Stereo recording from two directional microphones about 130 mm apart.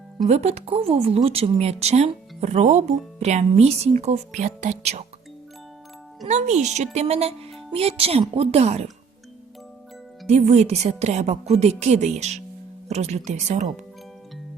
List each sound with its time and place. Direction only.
0.3 s speech: 55° right (ahead or behind)
6.2 s speech: 60° right (ahead or behind)
10.2 s speech: 60° right (ahead or behind)